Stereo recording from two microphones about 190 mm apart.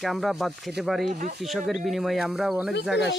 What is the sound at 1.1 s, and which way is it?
Speech, 45° right (ahead or behind).